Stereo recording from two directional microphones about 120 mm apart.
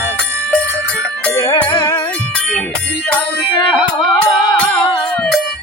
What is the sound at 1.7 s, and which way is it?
Music, 40° left (ahead or behind).